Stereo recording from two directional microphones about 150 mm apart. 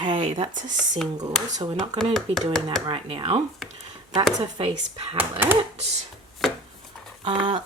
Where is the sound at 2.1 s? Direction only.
5° left (ahead or behind).